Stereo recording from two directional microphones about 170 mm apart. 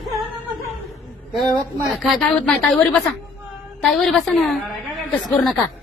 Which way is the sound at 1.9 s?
Centre (ahead or behind).